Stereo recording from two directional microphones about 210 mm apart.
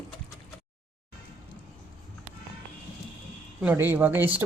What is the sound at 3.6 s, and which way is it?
Speech, 10° right (ahead or behind).